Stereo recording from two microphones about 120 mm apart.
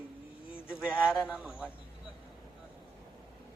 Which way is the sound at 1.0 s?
10° right (ahead or behind).